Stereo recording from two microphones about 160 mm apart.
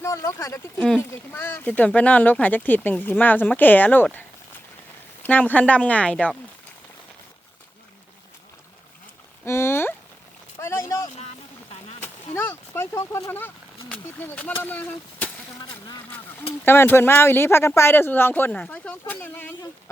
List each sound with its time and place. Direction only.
0.0 s speech: 20° left (ahead or behind)
0.8 s speech: 5° left (ahead or behind)
5.2 s speech: 10° left (ahead or behind)
9.4 s speech: 15° left (ahead or behind)
10.6 s vehicle: 20° left (ahead or behind)
12.0 s speech: 10° left (ahead or behind)
16.6 s speech: 15° left (ahead or behind)